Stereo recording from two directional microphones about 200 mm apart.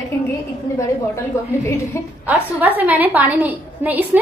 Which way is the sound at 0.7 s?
15° left (ahead or behind).